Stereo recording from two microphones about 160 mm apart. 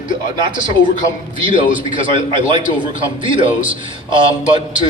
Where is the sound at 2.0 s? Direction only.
30° right (ahead or behind).